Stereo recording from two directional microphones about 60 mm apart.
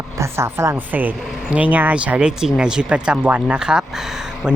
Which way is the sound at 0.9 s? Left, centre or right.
Right.